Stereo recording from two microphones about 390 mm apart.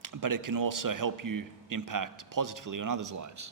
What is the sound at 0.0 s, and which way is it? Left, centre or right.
A man's voice, right.